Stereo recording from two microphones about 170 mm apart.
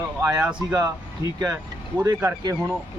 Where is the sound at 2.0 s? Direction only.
15° right (ahead or behind).